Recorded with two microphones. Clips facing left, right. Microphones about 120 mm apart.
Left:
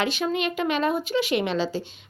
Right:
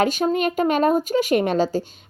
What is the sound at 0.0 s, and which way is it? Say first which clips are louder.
A woman's voice: right 5 dB; 45° right (ahead or behind).